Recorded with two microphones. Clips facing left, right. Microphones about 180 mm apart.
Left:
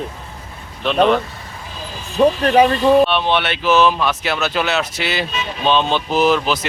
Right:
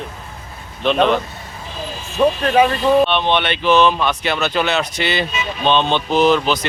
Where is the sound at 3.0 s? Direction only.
5° left (ahead or behind).